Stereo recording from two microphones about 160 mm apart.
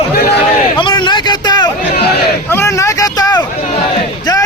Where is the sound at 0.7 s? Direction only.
30° left (ahead or behind).